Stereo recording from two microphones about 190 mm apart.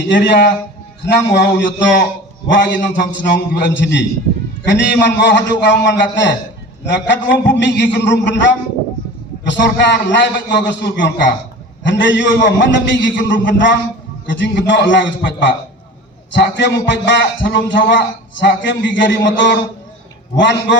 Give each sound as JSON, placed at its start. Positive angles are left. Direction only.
{"t": 0.1, "sound": "a man's voice", "side_deg": 65}
{"t": 14.3, "sound": "a man's voice", "side_deg": 70}